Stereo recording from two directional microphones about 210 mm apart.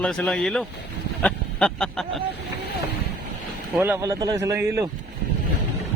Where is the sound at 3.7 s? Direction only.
10° right (ahead or behind).